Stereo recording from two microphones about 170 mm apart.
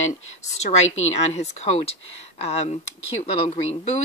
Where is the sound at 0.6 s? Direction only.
40° left (ahead or behind).